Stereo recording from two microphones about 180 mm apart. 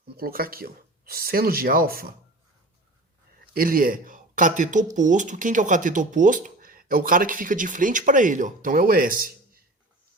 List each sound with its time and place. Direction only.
0.1 s speech: 55° right (ahead or behind)
3.5 s a man's voice: 55° right (ahead or behind)